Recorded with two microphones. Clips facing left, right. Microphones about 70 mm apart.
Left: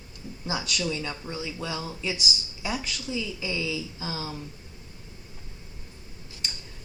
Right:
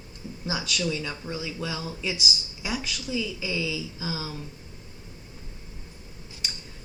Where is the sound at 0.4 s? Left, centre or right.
Centre.